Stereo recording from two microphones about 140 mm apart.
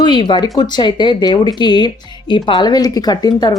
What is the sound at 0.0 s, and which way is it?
Speech, 30° left (ahead or behind).